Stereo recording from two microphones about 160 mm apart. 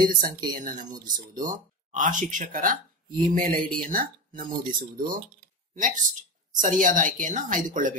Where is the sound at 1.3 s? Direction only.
55° right (ahead or behind).